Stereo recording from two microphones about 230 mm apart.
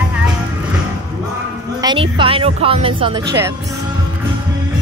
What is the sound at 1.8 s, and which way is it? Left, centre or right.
Music, right.